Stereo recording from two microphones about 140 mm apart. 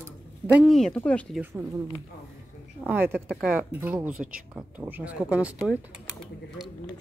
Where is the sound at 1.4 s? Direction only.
20° right (ahead or behind).